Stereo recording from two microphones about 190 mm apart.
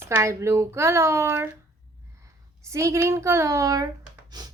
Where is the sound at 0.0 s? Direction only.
15° right (ahead or behind).